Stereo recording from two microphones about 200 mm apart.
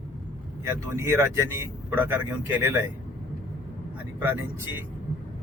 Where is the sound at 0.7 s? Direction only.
15° right (ahead or behind).